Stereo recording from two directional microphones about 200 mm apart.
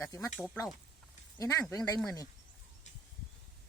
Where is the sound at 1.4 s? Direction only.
15° left (ahead or behind).